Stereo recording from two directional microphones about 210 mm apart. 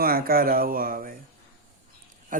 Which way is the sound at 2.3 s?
40° right (ahead or behind).